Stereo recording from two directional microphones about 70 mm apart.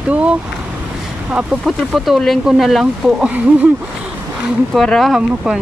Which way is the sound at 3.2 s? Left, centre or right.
Centre.